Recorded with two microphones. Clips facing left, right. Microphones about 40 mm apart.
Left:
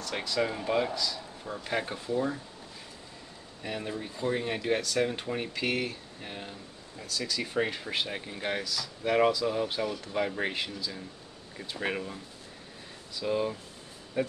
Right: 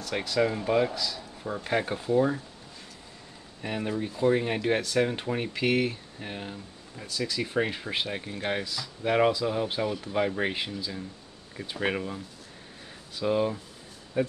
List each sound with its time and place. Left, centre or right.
0.0 s speech: centre
3.6 s speech: centre
13.2 s speech: centre